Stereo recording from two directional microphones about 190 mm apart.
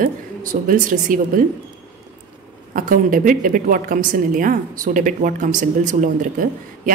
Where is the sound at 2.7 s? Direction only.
45° right (ahead or behind).